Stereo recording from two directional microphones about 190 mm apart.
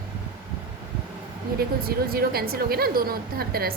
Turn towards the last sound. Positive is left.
turn(degrees=-50)  # may be behind; listen again after turning